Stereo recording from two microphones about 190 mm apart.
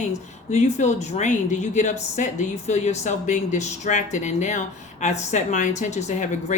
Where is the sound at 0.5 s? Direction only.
40° left (ahead or behind).